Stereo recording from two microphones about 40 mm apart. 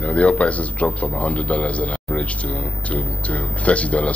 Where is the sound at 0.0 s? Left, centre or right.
Left.